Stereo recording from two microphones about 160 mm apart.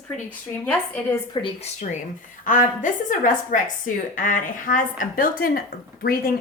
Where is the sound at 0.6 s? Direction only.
10° left (ahead or behind).